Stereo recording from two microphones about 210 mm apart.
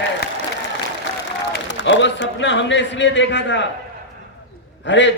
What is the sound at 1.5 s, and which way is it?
Speech, 60° left (ahead or behind).